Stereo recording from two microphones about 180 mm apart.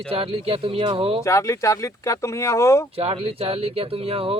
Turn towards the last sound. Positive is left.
turn(degrees=-35)  # may be behind; listen again after turning